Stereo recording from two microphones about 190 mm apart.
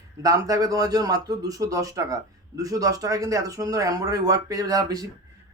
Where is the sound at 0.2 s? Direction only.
20° right (ahead or behind).